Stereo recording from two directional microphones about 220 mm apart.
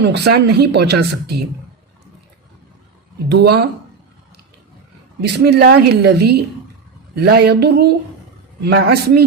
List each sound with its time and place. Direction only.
0.0 s speech: 50° right (ahead or behind)
3.2 s speech: 50° right (ahead or behind)
5.2 s speech: 50° right (ahead or behind)